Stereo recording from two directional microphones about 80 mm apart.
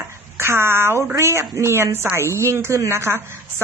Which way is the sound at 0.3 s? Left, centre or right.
Right.